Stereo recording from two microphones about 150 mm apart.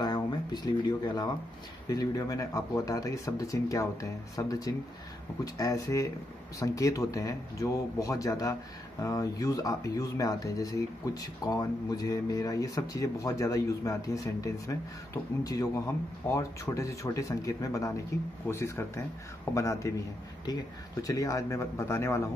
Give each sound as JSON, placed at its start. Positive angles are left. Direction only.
{"t": 0.0, "sound": "speech", "side_deg": 25}
{"t": 21.0, "sound": "speech", "side_deg": 25}